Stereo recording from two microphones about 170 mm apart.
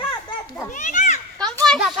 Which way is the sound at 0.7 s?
50° left (ahead or behind).